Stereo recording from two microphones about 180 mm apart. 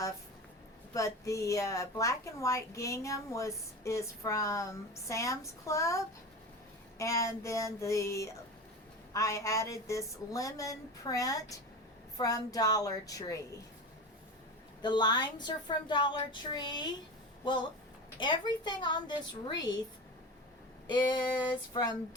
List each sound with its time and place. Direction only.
0.9 s a woman's voice: 15° left (ahead or behind)
7.0 s a woman's voice: 15° left (ahead or behind)
14.8 s a woman's voice: 25° left (ahead or behind)
20.8 s a woman's voice: 25° left (ahead or behind)